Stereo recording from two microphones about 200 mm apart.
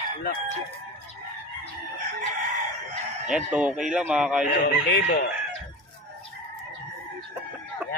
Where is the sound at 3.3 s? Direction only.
5° right (ahead or behind).